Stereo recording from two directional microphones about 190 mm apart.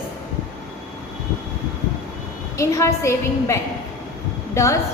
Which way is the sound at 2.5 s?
15° left (ahead or behind).